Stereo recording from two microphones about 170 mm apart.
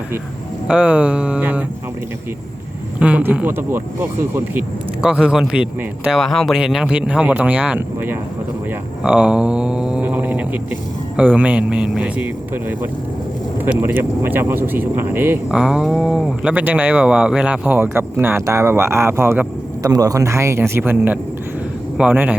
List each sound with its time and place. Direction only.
0.7 s speech: 10° right (ahead or behind)
3.0 s speech: 10° right (ahead or behind)
9.0 s a sound: 5° right (ahead or behind)
11.2 s speech: 10° right (ahead or behind)